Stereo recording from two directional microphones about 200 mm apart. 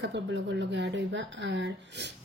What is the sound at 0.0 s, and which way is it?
Speech, 60° right (ahead or behind).